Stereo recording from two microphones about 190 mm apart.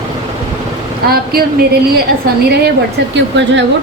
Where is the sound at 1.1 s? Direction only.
55° right (ahead or behind).